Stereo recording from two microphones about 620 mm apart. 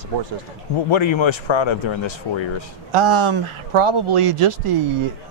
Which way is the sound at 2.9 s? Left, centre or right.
Right.